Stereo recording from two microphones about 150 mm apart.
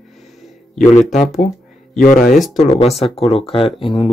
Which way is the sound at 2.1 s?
65° left (ahead or behind).